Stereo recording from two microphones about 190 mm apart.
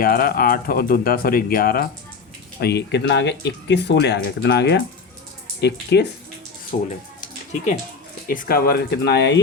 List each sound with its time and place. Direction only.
0.0 s speech: 50° left (ahead or behind)
6.7 s speech: 40° left (ahead or behind); by 9.4 s 65° left (ahead or behind)